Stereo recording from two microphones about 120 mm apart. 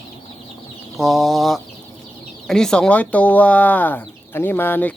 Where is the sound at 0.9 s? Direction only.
Centre (ahead or behind).